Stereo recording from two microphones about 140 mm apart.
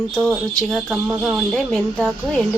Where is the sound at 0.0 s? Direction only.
5° left (ahead or behind).